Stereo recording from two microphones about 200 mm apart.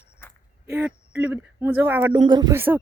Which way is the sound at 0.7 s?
5° right (ahead or behind).